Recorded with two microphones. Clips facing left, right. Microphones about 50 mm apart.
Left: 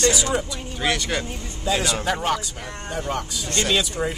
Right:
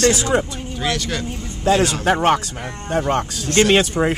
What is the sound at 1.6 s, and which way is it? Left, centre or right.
Speech, right.